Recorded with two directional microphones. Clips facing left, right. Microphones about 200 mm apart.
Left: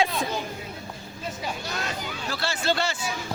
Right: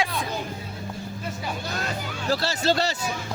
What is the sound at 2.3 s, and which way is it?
Speech, 40° right (ahead or behind).